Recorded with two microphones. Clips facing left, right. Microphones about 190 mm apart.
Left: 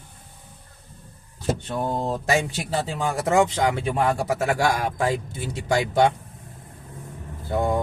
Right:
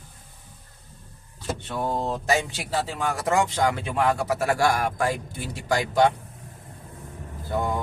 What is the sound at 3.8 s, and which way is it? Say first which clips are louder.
Speech: left 1 dB; 30° left (ahead or behind).